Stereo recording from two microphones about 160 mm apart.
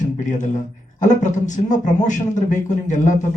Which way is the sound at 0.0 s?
50° left (ahead or behind).